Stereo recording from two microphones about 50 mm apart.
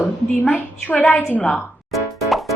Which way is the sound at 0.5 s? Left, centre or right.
Left.